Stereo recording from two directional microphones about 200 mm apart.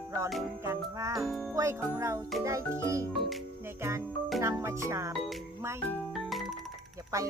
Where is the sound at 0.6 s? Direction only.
15° right (ahead or behind).